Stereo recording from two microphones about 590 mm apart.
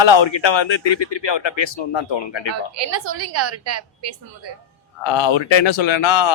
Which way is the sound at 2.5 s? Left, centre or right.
Right.